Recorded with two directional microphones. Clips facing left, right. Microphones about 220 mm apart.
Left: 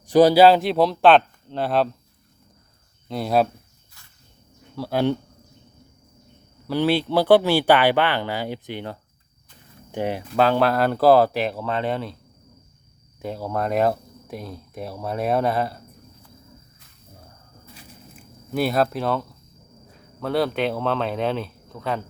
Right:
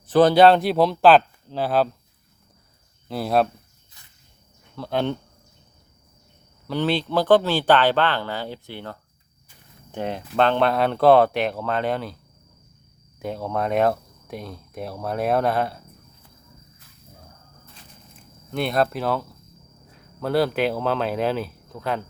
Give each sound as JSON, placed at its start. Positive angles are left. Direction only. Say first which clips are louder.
{"t": 0.0, "sound": "speech", "louder": "left 1 dB", "side_deg": 10}
{"t": 3.1, "sound": "speech", "louder": "even", "side_deg": 0}
{"t": 4.0, "sound": "cricket", "louder": "even", "side_deg": -20}
{"t": 4.8, "sound": "speech", "louder": "left 3 dB", "side_deg": 10}
{"t": 6.7, "sound": "speech", "louder": "left 3 dB", "side_deg": 10}
{"t": 13.1, "sound": "speech", "louder": "even", "side_deg": 0}
{"t": 18.5, "sound": "speech", "louder": "left 1 dB", "side_deg": 5}